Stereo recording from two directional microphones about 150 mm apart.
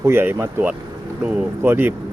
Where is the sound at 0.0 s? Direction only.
15° right (ahead or behind).